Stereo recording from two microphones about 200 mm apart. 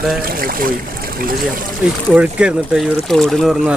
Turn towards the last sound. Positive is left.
turn(degrees=0)  # may be behind; listen again after turning